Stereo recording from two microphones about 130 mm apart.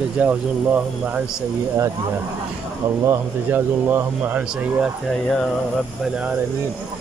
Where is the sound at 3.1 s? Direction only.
15° right (ahead or behind).